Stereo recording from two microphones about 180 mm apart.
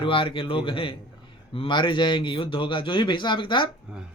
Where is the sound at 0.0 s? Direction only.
30° left (ahead or behind).